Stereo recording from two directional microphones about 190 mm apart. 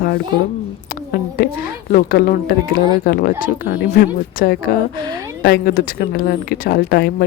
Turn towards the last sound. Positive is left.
turn(degrees=55)  # may be behind; listen again after turning